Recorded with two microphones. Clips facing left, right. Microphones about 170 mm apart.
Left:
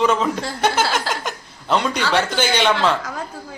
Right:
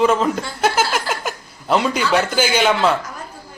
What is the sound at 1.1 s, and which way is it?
Chuckle, 5° right (ahead or behind).